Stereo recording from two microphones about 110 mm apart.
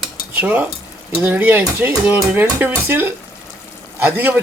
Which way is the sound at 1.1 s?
15° right (ahead or behind).